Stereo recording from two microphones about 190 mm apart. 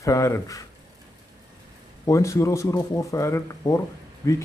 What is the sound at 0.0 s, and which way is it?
Speech, 15° left (ahead or behind).